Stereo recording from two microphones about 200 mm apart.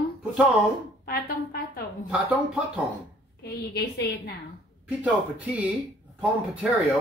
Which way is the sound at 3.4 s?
55° left (ahead or behind).